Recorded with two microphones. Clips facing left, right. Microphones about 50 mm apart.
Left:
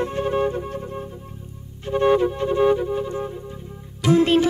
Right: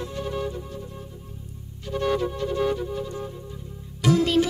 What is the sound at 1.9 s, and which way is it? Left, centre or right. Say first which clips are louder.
Music: left 7 dB; left.